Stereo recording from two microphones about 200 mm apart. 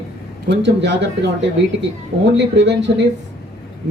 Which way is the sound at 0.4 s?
60° right (ahead or behind).